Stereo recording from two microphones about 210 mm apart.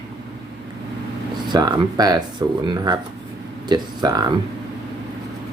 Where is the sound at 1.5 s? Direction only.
20° right (ahead or behind).